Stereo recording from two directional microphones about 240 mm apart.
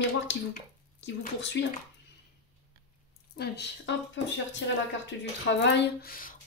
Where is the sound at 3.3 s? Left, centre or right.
Left.